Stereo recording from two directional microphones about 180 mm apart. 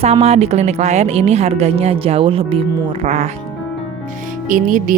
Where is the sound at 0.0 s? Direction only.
35° right (ahead or behind).